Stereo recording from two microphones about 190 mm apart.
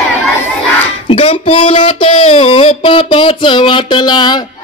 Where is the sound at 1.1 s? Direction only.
30° left (ahead or behind).